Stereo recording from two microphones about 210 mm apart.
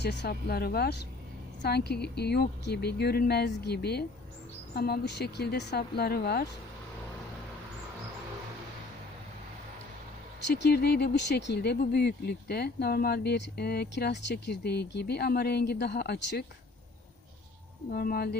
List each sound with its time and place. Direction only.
0.0 s speech: 55° left (ahead or behind)
10.4 s speech: 55° left (ahead or behind)
17.9 s speech: 45° left (ahead or behind)